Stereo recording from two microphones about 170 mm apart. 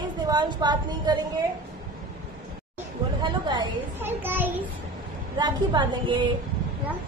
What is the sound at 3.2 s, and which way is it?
Speech, 25° right (ahead or behind).